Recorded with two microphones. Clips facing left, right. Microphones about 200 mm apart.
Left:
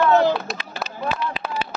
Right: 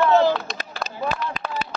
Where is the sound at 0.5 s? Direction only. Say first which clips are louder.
Left 1 dB; 45° right (ahead or behind).